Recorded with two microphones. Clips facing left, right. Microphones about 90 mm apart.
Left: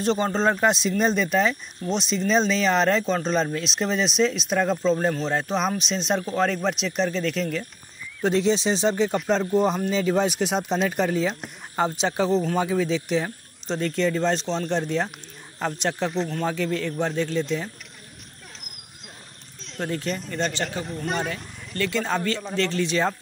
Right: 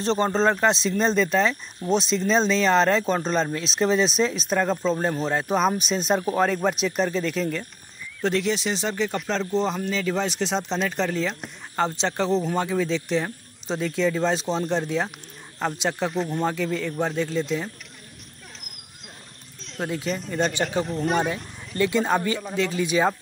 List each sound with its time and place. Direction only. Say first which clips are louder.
0.0 s speech: right 1 dB; 5° left (ahead or behind)
8.2 s speech: left 2 dB; 20° left (ahead or behind); by 17.6 s centre (ahead or behind)
19.6 s speech: even; 5° right (ahead or behind)
21.7 s speech: right 3 dB; 15° right (ahead or behind)